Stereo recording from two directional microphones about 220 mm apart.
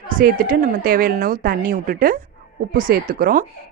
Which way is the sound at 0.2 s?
40° right (ahead or behind).